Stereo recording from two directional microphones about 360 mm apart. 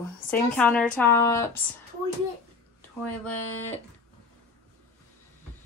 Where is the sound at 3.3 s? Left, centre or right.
Left.